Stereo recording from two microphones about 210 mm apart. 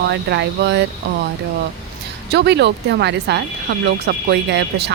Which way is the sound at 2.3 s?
55° right (ahead or behind).